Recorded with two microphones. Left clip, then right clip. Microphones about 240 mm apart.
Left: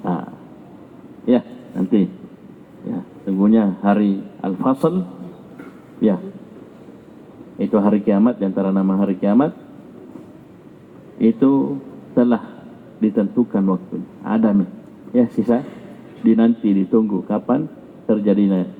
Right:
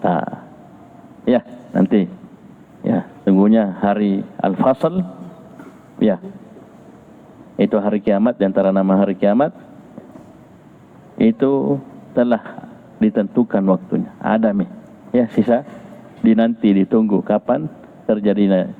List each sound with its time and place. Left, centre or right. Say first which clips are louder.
0.0 s a sound: right 7 dB; right
6.0 s speech: right 2 dB; right
7.6 s speech: right 1 dB; right
11.2 s speech: right 1 dB; right